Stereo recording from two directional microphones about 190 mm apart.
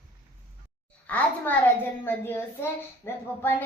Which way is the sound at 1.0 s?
10° left (ahead or behind).